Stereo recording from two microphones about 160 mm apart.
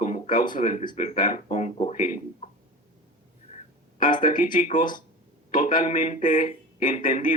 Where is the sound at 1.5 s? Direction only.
45° left (ahead or behind).